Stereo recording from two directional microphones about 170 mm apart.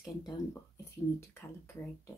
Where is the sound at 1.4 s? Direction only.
15° left (ahead or behind).